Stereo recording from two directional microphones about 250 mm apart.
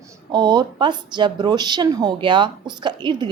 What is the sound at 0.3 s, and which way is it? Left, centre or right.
A woman's voice, centre.